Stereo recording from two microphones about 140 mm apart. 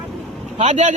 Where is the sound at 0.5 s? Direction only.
50° right (ahead or behind).